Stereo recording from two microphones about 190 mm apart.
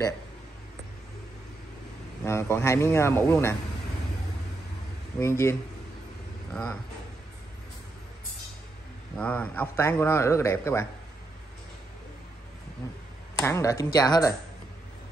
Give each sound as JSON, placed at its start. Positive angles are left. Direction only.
{"t": 2.2, "sound": "a man's voice", "side_deg": 15}
{"t": 5.2, "sound": "a man's voice", "side_deg": 15}
{"t": 9.1, "sound": "a man's voice", "side_deg": 5}
{"t": 13.4, "sound": "a man's voice", "side_deg": 15}